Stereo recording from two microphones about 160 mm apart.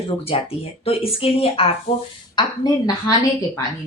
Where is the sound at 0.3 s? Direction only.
35° left (ahead or behind).